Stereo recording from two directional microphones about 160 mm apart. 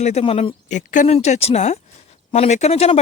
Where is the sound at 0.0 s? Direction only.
45° left (ahead or behind).